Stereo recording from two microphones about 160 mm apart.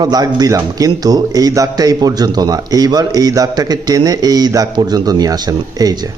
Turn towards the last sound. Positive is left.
turn(degrees=-20)  # may be behind; listen again after turning